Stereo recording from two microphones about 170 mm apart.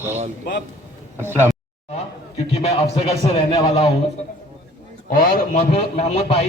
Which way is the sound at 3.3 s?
25° left (ahead or behind).